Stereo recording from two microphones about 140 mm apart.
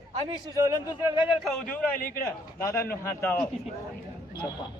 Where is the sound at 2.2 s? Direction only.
20° left (ahead or behind).